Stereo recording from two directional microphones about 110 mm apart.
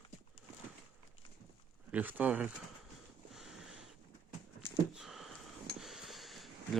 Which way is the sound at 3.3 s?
5° right (ahead or behind).